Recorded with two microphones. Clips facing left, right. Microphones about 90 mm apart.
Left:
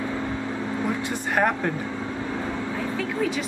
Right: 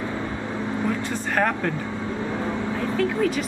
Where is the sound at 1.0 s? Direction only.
15° left (ahead or behind).